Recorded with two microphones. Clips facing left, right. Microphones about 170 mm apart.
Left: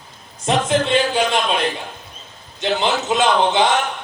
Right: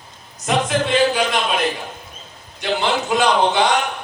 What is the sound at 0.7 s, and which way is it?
Speech, 25° left (ahead or behind).